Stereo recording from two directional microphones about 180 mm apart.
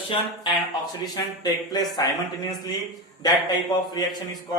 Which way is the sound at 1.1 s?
20° left (ahead or behind).